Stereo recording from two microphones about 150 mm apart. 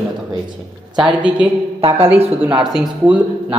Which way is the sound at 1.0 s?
30° right (ahead or behind).